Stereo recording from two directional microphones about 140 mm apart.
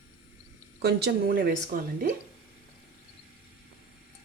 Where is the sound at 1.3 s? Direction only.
90° right.